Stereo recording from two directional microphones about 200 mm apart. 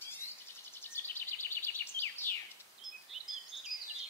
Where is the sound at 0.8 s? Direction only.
10° left (ahead or behind).